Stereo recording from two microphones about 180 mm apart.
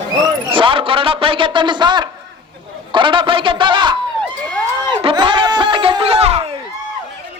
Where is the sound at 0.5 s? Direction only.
30° right (ahead or behind).